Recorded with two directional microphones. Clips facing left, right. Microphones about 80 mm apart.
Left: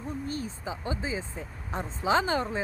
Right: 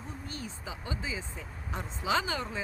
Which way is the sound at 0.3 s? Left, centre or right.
Left.